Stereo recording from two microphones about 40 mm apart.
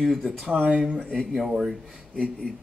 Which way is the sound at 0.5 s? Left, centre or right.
Right.